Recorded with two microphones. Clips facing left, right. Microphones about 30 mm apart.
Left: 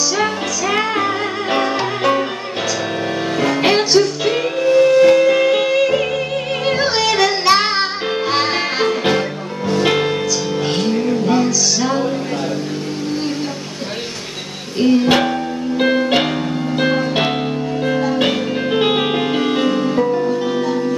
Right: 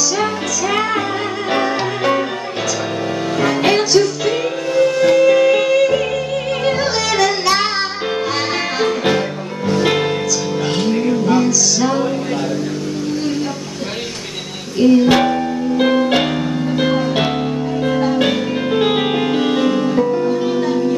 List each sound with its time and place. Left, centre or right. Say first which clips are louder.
0.2 s music: even; centre
3.6 s music: even; left
9.7 s music: even; centre
14.8 s music: right 2 dB; centre